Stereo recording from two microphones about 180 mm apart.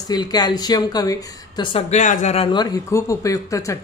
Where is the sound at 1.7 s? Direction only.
40° left (ahead or behind).